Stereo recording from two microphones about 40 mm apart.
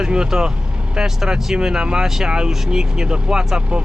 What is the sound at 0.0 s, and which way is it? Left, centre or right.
Speech, centre.